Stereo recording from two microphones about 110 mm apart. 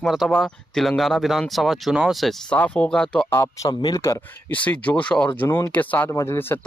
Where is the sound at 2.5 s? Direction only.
15° left (ahead or behind).